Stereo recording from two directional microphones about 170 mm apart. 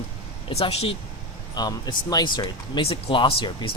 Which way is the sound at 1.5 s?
25° left (ahead or behind).